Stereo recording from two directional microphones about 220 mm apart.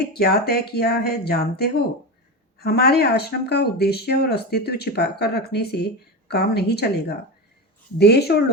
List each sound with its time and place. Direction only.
0.0 s speech: 45° left (ahead or behind)